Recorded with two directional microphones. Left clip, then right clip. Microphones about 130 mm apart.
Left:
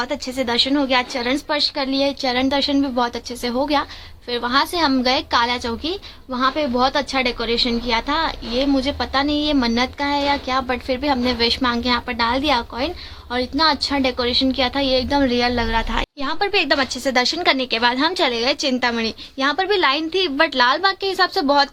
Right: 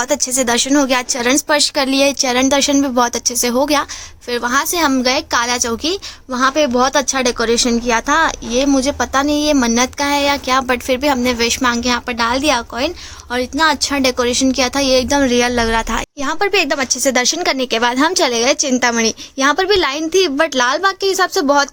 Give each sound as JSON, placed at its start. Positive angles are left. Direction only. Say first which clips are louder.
{"t": 0.0, "sound": "a woman's voice", "louder": "right 6 dB", "side_deg": -60}
{"t": 4.3, "sound": "a woman's voice", "louder": "right 3 dB", "side_deg": -35}
{"t": 14.0, "sound": "a woman's voice", "louder": "right 4 dB", "side_deg": -55}